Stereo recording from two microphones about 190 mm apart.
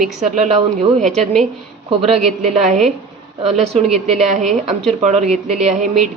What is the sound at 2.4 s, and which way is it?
Speech, 35° right (ahead or behind).